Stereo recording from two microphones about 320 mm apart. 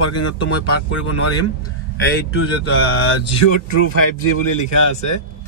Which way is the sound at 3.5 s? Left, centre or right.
Left.